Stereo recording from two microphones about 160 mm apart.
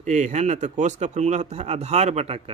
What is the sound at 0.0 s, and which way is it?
A man's voice, 45° right (ahead or behind).